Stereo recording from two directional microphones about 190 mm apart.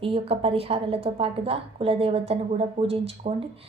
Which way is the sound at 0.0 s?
30° right (ahead or behind).